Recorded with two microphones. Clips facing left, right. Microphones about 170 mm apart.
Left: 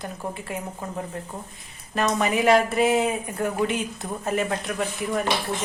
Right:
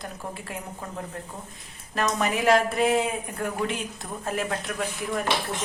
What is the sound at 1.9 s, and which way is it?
Speech, centre (ahead or behind).